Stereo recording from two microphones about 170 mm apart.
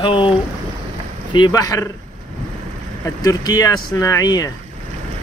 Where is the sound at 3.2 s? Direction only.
25° left (ahead or behind).